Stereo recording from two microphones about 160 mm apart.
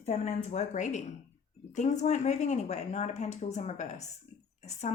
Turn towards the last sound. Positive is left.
turn(degrees=45)  # may be behind; listen again after turning